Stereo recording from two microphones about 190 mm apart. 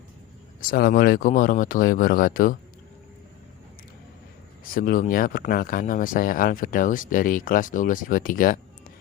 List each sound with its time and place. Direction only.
0.6 s speech: 50° left (ahead or behind)
4.6 s speech: 45° left (ahead or behind)